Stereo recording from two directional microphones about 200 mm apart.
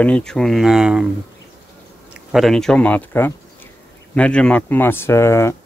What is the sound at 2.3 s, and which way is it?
Speech, centre (ahead or behind).